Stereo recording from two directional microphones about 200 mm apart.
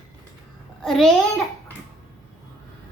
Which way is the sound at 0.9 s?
Centre (ahead or behind).